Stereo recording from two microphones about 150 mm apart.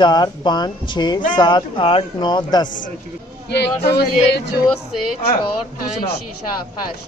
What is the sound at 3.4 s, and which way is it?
Speech, 90° left.